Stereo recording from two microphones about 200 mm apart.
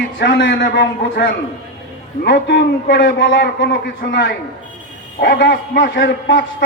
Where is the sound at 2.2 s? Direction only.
60° left (ahead or behind).